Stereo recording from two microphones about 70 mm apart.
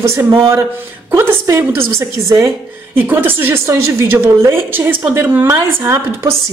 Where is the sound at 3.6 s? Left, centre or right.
Right.